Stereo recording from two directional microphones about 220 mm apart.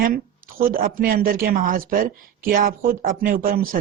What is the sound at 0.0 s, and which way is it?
Speech, 40° right (ahead or behind).